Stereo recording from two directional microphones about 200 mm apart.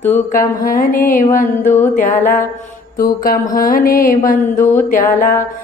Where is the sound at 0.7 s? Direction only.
45° left (ahead or behind).